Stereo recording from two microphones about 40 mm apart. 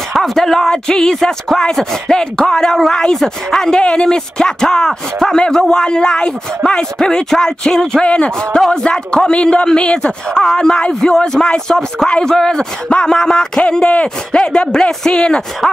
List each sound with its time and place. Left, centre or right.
0.1 s a sound: centre
1.5 s speech: centre
4.4 s speech: centre
8.0 s speech: left
8.4 s speech: centre
13.7 s speech: left